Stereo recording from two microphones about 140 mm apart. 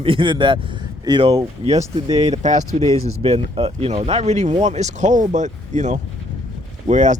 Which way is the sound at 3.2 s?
45° right (ahead or behind).